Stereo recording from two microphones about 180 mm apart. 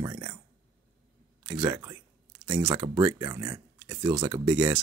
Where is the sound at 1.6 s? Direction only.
20° right (ahead or behind).